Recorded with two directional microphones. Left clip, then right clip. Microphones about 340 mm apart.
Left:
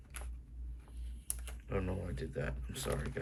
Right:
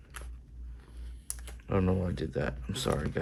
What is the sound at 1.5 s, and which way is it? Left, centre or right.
Speech, centre.